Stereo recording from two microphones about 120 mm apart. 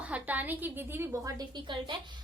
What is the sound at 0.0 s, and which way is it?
A woman's voice, 10° right (ahead or behind).